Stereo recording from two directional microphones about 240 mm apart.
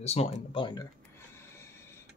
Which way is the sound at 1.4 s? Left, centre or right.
Centre.